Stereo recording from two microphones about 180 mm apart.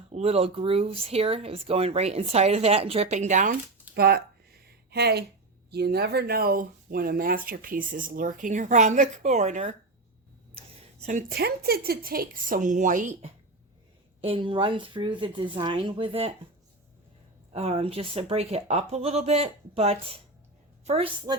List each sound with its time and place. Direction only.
0.1 s speech: 35° right (ahead or behind)
3.9 s a sound: 60° right (ahead or behind)
5.7 s speech: 65° right (ahead or behind); by 9.7 s 40° right (ahead or behind)
11.3 s speech: 60° right (ahead or behind); by 13.3 s 45° right (ahead or behind)
14.2 s speech: 30° right (ahead or behind)
17.5 s a woman's voice: 35° right (ahead or behind)